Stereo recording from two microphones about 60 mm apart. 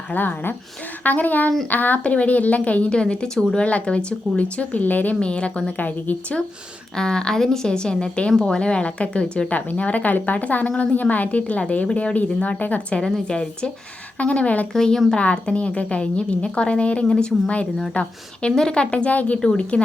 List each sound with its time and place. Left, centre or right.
0.1 s a woman's voice: left
6.9 s a woman's voice: centre
13.0 s a woman's voice: centre
14.7 s a woman's voice: centre
15.1 s a woman's voice: centre
18.4 s a woman's voice: centre